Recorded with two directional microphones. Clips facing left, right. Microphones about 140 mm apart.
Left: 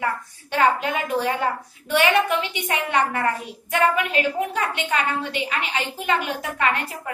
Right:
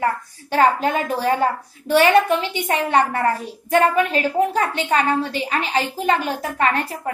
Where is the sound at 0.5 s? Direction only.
35° right (ahead or behind).